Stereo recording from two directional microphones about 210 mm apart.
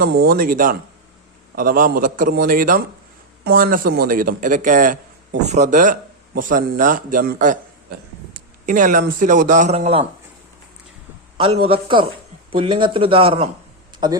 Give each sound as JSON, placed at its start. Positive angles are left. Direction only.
{"t": 0.0, "sound": "a man's voice", "side_deg": -45}
{"t": 11.3, "sound": "a man's voice", "side_deg": -25}